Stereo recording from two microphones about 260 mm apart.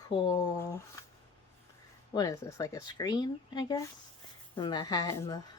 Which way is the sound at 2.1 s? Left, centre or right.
Centre.